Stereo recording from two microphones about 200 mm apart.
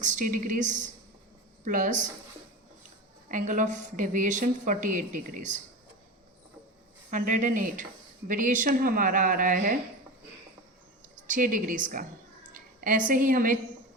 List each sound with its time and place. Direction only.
0.0 s a woman's voice: 40° right (ahead or behind)
3.2 s a woman's voice: 40° right (ahead or behind)
7.1 s a woman's voice: 40° right (ahead or behind)
11.1 s a woman's voice: 40° right (ahead or behind)